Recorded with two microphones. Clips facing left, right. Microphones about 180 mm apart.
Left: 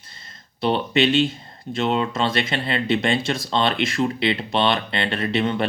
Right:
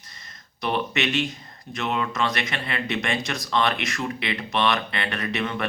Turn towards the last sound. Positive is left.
turn(degrees=30)  # may be behind; listen again after turning